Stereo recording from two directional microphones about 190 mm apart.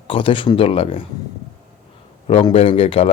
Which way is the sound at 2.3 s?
30° left (ahead or behind).